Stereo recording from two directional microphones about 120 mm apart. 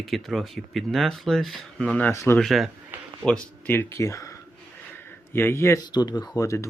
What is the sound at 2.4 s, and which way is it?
Speech, centre (ahead or behind).